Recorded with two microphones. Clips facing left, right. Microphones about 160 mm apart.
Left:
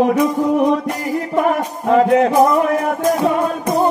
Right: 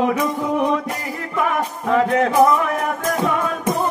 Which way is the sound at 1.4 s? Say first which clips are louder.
Left 3 dB; 40° left (ahead or behind).